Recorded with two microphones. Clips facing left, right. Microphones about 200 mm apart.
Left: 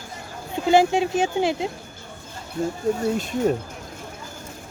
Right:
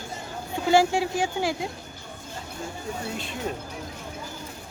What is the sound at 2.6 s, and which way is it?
Speech, 55° left (ahead or behind).